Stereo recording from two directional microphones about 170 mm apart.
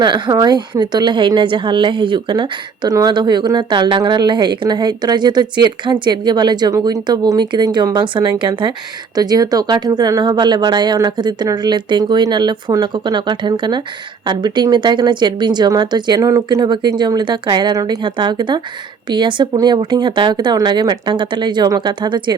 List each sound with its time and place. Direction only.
0.0 s a woman's voice: 25° right (ahead or behind)